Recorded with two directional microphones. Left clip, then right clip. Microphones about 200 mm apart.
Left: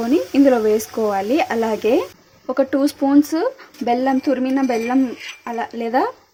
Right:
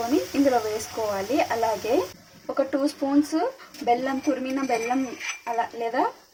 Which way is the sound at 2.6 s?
50° left (ahead or behind).